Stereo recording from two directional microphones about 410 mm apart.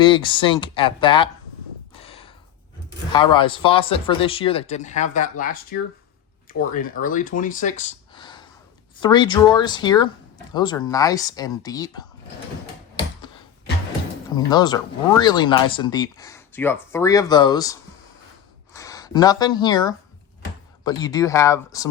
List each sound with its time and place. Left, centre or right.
0.0 s speech: centre
1.9 s crow: centre
3.1 s speech: centre
14.3 s speech: centre